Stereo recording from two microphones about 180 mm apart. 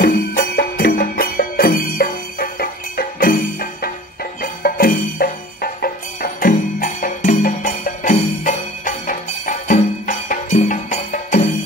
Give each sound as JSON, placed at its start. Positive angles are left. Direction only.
{"t": 0.0, "sound": "music", "side_deg": 55}